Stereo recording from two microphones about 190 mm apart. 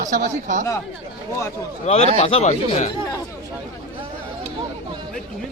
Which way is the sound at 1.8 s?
35° left (ahead or behind).